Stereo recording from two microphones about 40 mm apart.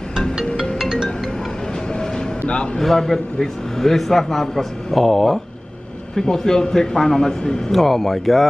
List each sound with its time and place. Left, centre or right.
2.8 s a man's voice: centre
7.7 s a man's voice: centre